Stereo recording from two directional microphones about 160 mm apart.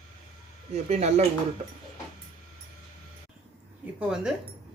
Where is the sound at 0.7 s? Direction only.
40° right (ahead or behind).